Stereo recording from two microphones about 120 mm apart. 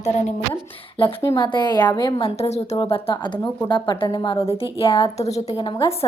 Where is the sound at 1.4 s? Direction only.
40° left (ahead or behind); by 2.6 s 55° left (ahead or behind).